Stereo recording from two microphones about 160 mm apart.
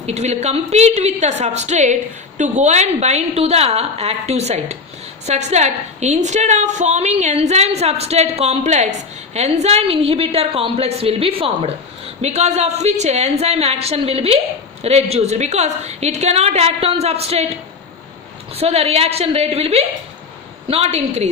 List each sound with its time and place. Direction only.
0.0 s a woman's voice: 45° right (ahead or behind)
18.5 s a woman's voice: 40° right (ahead or behind)